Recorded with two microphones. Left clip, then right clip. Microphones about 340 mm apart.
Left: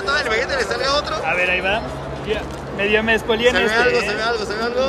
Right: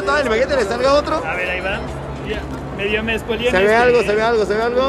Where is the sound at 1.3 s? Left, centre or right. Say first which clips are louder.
Left 3 dB; left.